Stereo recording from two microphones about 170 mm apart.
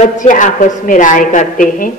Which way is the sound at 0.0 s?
45° left (ahead or behind).